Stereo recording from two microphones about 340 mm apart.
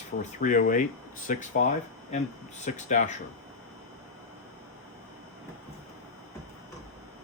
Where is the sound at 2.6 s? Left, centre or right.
Left.